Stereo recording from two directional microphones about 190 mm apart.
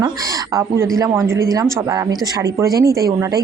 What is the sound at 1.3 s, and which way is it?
Speech, 15° right (ahead or behind).